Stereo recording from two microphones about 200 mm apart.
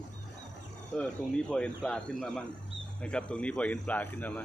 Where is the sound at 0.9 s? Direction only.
5° left (ahead or behind).